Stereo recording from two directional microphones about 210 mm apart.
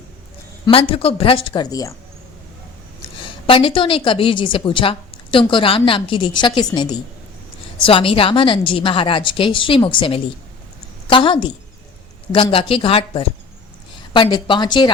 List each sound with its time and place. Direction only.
0.6 s a woman's voice: 25° left (ahead or behind)
3.2 s a woman's voice: 25° left (ahead or behind)